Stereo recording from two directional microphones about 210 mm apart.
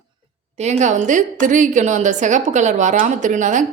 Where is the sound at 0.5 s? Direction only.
30° right (ahead or behind).